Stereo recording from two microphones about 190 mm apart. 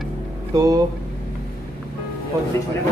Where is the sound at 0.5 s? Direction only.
20° right (ahead or behind).